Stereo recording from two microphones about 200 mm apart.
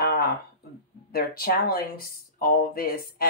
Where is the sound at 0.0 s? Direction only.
50° left (ahead or behind).